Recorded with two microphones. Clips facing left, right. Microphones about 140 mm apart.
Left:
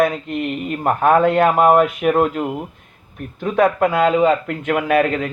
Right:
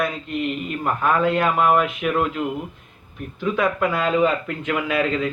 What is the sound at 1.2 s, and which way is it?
Mantra, 50° left (ahead or behind).